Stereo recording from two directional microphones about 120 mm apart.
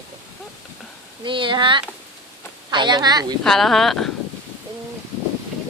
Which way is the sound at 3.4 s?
Centre (ahead or behind).